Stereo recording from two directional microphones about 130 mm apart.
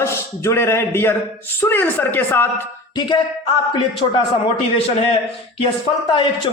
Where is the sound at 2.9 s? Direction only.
40° left (ahead or behind).